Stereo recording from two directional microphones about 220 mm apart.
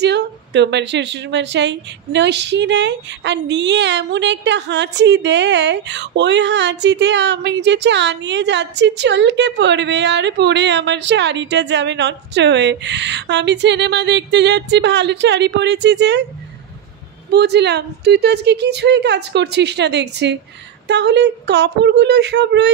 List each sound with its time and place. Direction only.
0.0 s a woman's voice: 50° right (ahead or behind)
17.3 s a woman's voice: 50° right (ahead or behind)